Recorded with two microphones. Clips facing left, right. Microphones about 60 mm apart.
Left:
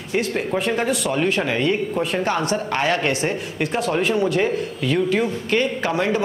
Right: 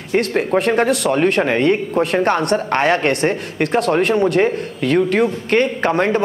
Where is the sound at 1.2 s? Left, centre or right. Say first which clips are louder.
Right 5 dB; right.